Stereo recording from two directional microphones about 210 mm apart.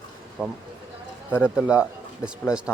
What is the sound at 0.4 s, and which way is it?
Speech, 5° right (ahead or behind).